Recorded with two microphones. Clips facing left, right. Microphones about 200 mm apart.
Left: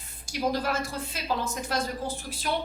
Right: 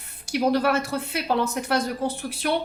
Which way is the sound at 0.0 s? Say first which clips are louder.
Right 6 dB; 65° right (ahead or behind).